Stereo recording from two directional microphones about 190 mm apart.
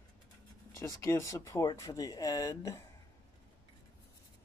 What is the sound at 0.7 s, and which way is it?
Speech, 15° left (ahead or behind).